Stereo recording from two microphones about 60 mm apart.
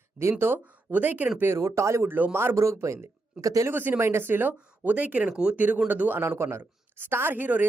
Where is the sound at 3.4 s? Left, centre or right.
Right.